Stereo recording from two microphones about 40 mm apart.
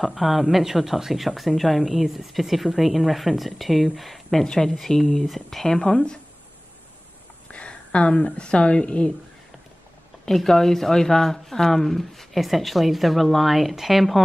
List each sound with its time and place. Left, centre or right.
0.0 s speech: centre
7.5 s speech: left
10.2 s speech: centre